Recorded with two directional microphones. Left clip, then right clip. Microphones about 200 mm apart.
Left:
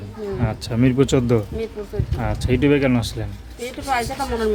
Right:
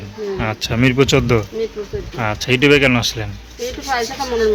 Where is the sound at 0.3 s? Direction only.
5° left (ahead or behind).